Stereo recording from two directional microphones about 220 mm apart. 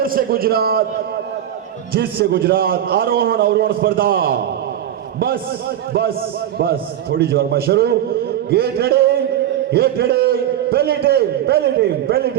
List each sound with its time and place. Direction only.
0.0 s a man's voice: 40° right (ahead or behind)
1.9 s a man's voice: 45° right (ahead or behind)
6.6 s a man's voice: 45° right (ahead or behind)